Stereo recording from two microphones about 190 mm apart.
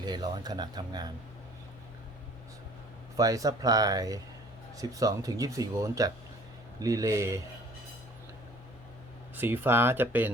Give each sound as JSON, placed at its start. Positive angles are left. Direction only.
{"t": 0.0, "sound": "speech", "side_deg": -20}
{"t": 3.2, "sound": "speech", "side_deg": -20}
{"t": 9.3, "sound": "speech", "side_deg": -10}